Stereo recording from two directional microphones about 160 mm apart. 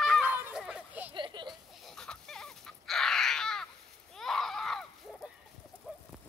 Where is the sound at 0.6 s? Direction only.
5° right (ahead or behind).